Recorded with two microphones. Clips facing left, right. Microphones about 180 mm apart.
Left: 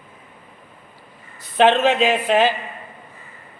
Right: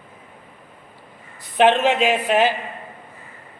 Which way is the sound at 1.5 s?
15° right (ahead or behind).